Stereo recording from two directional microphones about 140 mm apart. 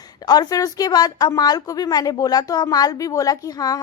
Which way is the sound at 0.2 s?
30° left (ahead or behind).